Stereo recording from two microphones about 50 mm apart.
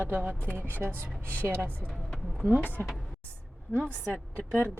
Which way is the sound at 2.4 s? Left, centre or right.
Right.